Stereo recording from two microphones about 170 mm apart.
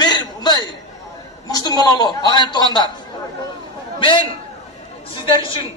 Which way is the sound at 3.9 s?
30° left (ahead or behind).